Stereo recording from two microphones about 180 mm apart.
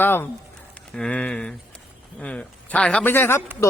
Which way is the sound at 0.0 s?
10° left (ahead or behind).